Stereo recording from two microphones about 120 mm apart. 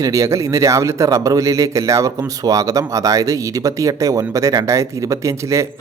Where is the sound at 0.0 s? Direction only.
30° right (ahead or behind).